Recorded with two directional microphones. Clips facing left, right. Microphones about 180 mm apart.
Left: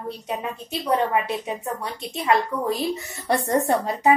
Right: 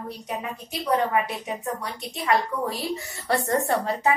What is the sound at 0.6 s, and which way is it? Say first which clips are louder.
A woman's voice: left 1 dB; 25° left (ahead or behind).